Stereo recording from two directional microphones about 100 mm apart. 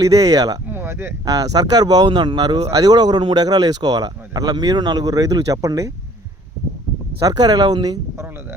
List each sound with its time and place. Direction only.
0.0 s speech: 35° right (ahead or behind)
0.7 s a sound: 25° right (ahead or behind)
1.2 s speech: 40° right (ahead or behind)
2.0 s speech: 55° right (ahead or behind)
2.6 s speech: 35° right (ahead or behind)
7.2 s speech: 40° right (ahead or behind)
8.1 s a sound: 25° right (ahead or behind)